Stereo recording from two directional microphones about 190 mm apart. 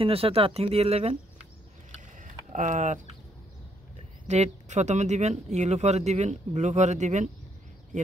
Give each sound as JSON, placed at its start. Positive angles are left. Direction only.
{"t": 0.0, "sound": "speech", "side_deg": -30}
{"t": 2.0, "sound": "a sound", "side_deg": -40}
{"t": 4.3, "sound": "speech", "side_deg": -35}